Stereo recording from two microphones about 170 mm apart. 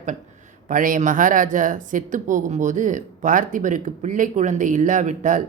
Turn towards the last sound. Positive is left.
turn(degrees=-45)  # may be behind; listen again after turning